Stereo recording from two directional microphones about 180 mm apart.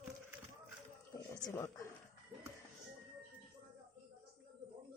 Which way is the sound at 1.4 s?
15° left (ahead or behind).